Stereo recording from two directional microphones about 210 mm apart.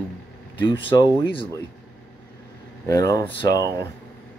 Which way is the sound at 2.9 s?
15° left (ahead or behind).